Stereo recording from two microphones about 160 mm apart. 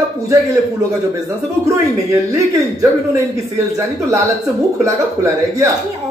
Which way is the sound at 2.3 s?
20° right (ahead or behind).